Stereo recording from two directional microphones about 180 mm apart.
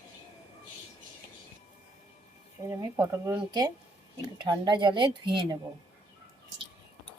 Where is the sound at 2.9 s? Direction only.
15° right (ahead or behind).